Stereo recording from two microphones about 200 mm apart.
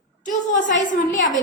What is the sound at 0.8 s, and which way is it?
Speech, 40° left (ahead or behind).